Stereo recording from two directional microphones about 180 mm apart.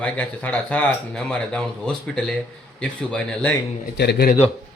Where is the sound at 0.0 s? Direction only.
5° left (ahead or behind).